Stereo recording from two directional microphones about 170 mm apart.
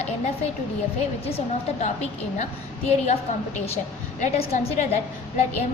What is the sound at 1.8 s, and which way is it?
A woman's voice, 45° left (ahead or behind).